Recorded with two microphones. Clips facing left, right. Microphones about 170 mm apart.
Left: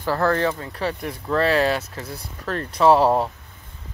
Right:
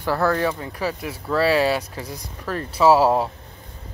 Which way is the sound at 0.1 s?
10° right (ahead or behind).